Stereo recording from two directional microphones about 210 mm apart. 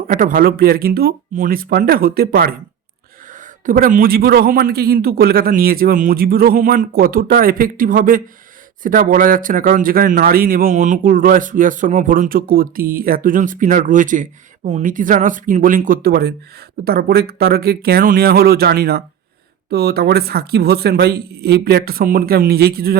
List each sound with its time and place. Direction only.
0.1 s a man's voice: 40° right (ahead or behind)
3.7 s a man's voice: 40° right (ahead or behind)